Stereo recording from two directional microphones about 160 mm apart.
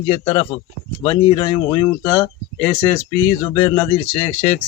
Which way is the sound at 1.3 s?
25° left (ahead or behind).